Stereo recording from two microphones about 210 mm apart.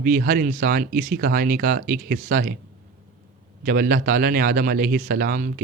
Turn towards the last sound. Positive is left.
turn(degrees=-40)  # may be behind; listen again after turning